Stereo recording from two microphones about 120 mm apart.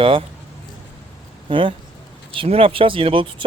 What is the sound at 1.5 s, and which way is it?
Speech, 45° right (ahead or behind).